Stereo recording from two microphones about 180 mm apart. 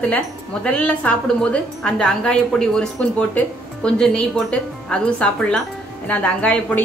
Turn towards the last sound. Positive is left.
turn(degrees=5)  # may be behind; listen again after turning